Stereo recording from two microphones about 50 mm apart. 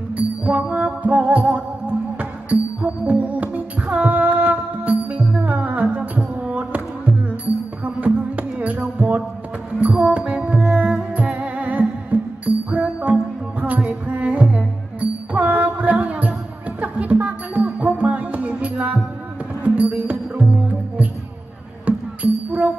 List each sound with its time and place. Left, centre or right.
0.2 s music: right
21.8 s music: right